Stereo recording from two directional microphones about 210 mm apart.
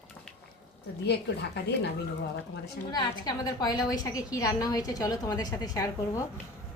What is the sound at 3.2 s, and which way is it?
A woman's voice, 20° left (ahead or behind).